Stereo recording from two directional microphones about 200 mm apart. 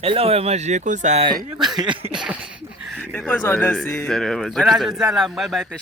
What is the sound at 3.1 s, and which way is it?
Speech, 5° left (ahead or behind).